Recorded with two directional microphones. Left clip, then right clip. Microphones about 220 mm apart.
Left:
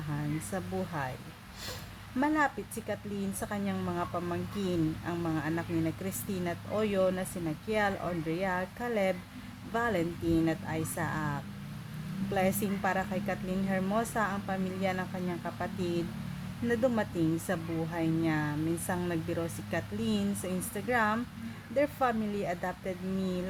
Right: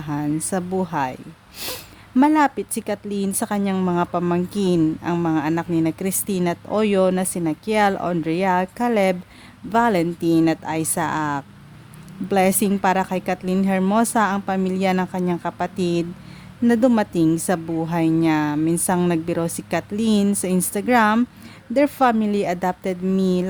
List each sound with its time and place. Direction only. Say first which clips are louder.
0.1 s a woman's voice: right 13 dB; 45° right (ahead or behind)